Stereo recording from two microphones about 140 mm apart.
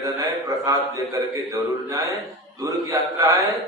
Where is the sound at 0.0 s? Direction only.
25° right (ahead or behind).